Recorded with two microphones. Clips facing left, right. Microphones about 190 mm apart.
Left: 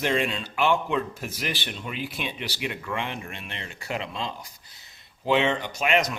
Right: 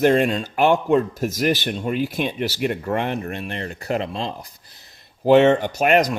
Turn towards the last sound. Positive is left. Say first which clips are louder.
# right 7 dB
turn(degrees=-45)  # may be behind; listen again after turning